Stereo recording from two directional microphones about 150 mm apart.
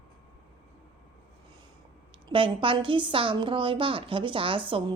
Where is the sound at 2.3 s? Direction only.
35° right (ahead or behind).